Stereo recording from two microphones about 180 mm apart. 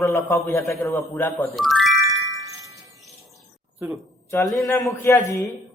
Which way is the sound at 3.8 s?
10° right (ahead or behind).